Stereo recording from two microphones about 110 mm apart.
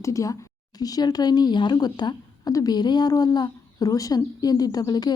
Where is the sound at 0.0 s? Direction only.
30° left (ahead or behind).